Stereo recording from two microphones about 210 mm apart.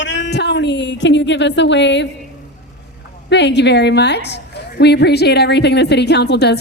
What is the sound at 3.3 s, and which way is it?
A woman's voice, 55° left (ahead or behind).